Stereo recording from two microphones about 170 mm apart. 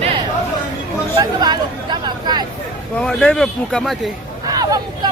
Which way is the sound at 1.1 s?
25° right (ahead or behind).